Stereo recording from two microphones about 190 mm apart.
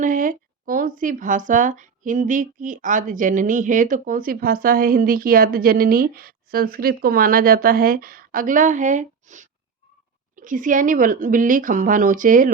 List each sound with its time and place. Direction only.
0.0 s speech: 45° right (ahead or behind)